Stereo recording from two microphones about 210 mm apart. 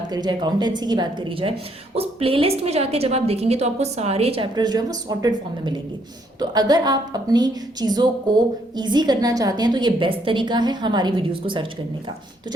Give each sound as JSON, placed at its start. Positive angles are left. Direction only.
{"t": 0.1, "sound": "a woman's voice", "side_deg": -20}